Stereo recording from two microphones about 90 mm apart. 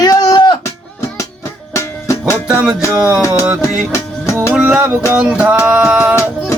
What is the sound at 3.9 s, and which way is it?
Music, 30° left (ahead or behind).